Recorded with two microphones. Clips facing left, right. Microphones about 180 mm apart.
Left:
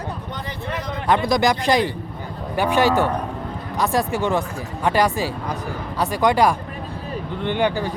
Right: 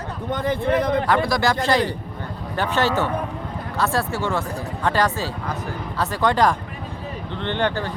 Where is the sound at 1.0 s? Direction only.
20° left (ahead or behind).